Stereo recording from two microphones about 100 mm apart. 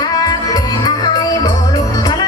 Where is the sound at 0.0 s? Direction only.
40° left (ahead or behind).